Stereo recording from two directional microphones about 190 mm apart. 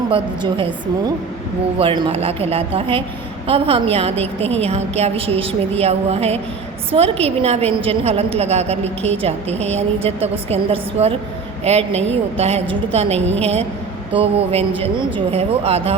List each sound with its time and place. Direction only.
0.1 s a woman's voice: 30° right (ahead or behind)
1.8 s a woman's voice: 25° right (ahead or behind)